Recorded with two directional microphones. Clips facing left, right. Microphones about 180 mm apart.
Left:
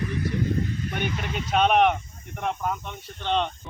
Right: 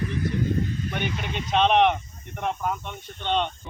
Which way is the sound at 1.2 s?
5° left (ahead or behind).